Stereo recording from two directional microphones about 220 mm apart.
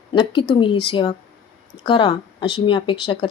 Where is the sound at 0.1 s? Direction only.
20° left (ahead or behind).